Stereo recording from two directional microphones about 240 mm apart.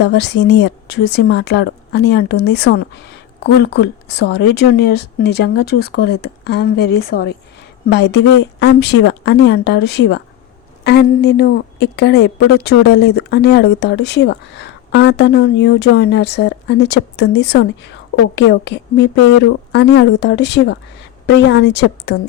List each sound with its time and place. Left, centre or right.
0.0 s a woman's voice: left